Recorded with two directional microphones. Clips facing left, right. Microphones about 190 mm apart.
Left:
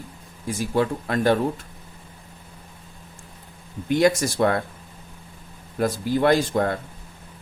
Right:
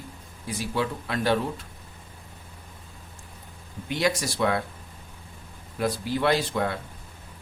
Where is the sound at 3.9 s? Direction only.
50° left (ahead or behind).